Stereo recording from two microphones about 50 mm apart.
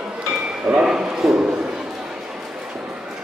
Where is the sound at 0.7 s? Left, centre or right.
Centre.